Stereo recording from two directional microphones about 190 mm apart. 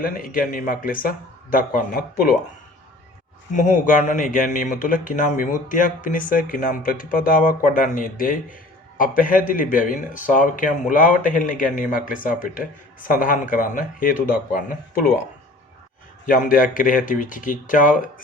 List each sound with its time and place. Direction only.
0.0 s speech: 50° left (ahead or behind)
3.5 s speech: 40° left (ahead or behind)
16.2 s speech: 45° left (ahead or behind)